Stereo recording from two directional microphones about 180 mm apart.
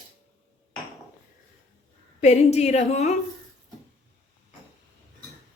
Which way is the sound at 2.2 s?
40° left (ahead or behind).